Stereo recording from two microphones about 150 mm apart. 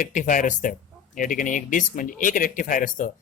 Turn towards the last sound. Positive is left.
turn(degrees=60)  # may be behind; listen again after turning